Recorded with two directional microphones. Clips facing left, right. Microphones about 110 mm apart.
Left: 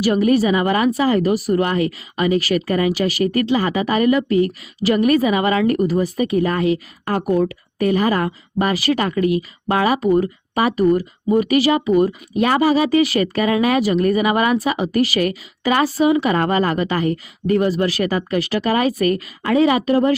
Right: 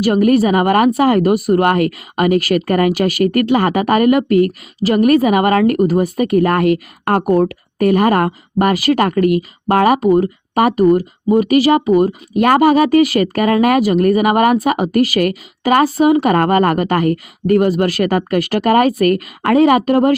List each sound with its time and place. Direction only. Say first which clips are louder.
0.0 s speech: right 3 dB; 50° right (ahead or behind)